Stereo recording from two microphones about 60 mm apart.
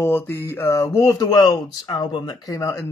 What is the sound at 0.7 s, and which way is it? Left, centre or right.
Speech, left.